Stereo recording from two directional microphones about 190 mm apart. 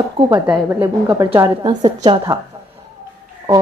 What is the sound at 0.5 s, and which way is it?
A woman's voice, 10° right (ahead or behind).